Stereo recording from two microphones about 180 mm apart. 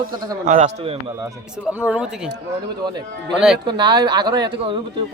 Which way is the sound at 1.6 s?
5° right (ahead or behind).